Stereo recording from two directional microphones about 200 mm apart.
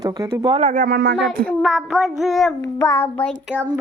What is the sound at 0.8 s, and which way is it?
Speech, 55° right (ahead or behind).